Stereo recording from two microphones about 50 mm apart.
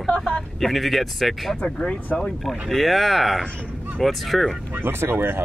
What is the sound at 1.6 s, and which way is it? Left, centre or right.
Speech, centre.